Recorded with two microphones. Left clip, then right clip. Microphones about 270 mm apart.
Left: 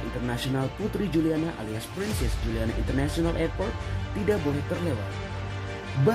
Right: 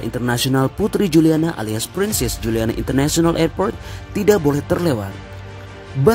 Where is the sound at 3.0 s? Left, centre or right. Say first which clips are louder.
Right 11 dB; right.